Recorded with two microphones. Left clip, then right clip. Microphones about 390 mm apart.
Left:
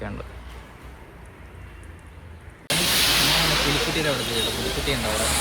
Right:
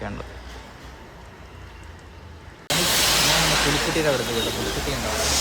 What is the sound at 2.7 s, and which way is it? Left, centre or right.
Hiss, right.